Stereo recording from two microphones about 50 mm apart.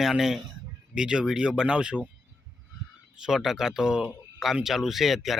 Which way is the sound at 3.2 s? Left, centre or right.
Centre.